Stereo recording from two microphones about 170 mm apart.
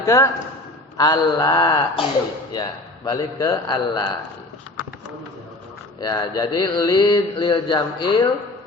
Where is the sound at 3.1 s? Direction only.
20° left (ahead or behind).